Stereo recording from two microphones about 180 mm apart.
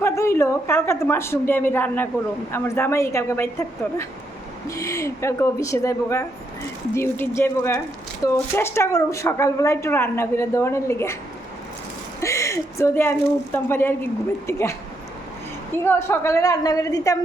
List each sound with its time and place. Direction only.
0.0 s a woman's voice: 15° left (ahead or behind)
12.2 s a woman's voice: 15° left (ahead or behind)
15.8 s a woman's voice: 15° left (ahead or behind)